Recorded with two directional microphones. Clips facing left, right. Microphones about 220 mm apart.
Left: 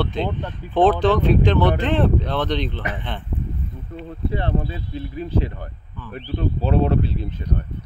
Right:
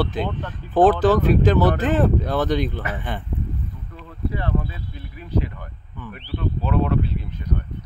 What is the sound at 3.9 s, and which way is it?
Speech, 30° left (ahead or behind).